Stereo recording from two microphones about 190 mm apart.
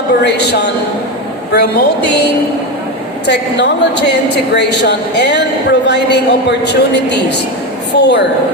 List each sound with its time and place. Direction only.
0.2 s speech: 60° left (ahead or behind)